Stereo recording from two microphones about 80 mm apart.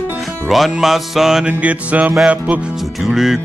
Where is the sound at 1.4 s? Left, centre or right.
Centre.